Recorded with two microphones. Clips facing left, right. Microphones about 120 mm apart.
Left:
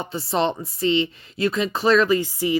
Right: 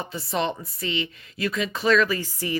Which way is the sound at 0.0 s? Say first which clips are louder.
Left 4 dB; 30° left (ahead or behind).